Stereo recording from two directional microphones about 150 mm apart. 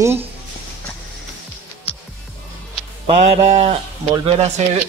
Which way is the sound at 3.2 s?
45° right (ahead or behind).